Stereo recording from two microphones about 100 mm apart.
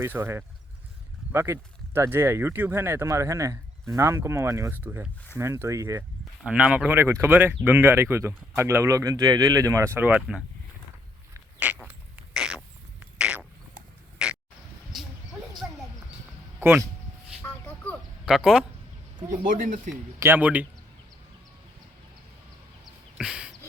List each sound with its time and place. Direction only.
0.0 s speech: 25° right (ahead or behind)
6.4 s speech: 10° right (ahead or behind)
7.0 s speech: 25° right (ahead or behind)
9.8 s speech: 20° right (ahead or behind)
10.2 s speech: 5° right (ahead or behind)
11.6 s a sound: 15° right (ahead or behind)
12.3 s rodents: 5° right (ahead or behind)
13.0 s a sound: 10° right (ahead or behind)
16.6 s speech: 20° right (ahead or behind)
18.3 s speech: 5° right (ahead or behind)
20.1 s speech: 20° right (ahead or behind)
23.1 s a sound: 5° right (ahead or behind)